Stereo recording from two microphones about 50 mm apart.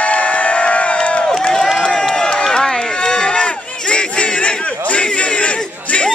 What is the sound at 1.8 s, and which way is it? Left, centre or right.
Run, centre.